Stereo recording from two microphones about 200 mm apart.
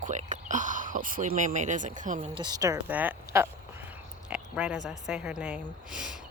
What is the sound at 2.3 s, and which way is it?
A woman's voice, 20° right (ahead or behind).